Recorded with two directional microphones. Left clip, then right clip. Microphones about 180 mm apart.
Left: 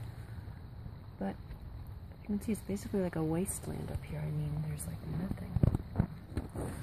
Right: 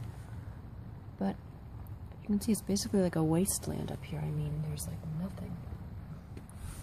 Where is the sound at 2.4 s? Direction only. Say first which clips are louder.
Right 6 dB; 25° right (ahead or behind).